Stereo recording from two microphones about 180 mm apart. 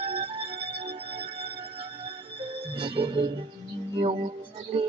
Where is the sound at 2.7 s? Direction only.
30° right (ahead or behind).